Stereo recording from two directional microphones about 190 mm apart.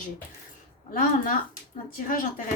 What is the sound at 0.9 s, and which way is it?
Speech, 50° left (ahead or behind).